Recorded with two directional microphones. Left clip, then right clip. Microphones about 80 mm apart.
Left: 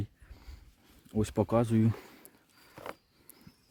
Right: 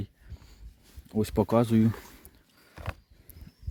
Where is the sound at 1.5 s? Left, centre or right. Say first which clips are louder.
Right 5 dB; right.